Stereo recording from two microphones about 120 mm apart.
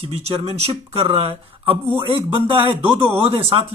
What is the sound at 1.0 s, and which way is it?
Mantra, 50° right (ahead or behind).